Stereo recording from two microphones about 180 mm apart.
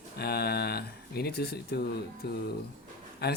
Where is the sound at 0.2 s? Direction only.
60° left (ahead or behind).